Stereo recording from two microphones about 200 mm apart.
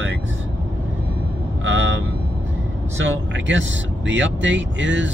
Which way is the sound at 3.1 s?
70° right (ahead or behind).